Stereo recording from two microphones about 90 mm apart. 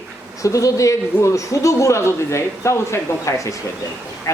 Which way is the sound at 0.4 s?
35° left (ahead or behind).